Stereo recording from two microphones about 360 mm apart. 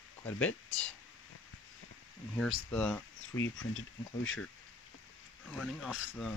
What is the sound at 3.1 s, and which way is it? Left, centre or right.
Speech, left.